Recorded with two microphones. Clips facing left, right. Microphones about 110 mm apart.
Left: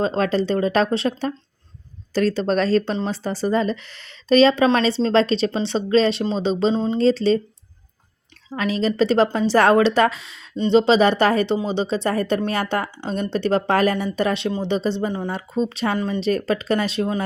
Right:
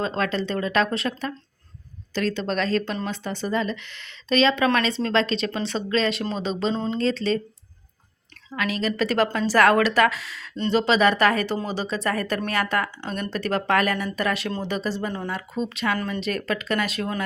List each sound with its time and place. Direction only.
0.0 s speech: 35° left (ahead or behind)
6.7 s speech: 15° left (ahead or behind)
7.0 s speech: 30° left (ahead or behind)
8.4 s speech: 30° left (ahead or behind)
15.3 s speech: 30° left (ahead or behind)
16.0 s speech: 20° left (ahead or behind)
16.2 s speech: 30° left (ahead or behind)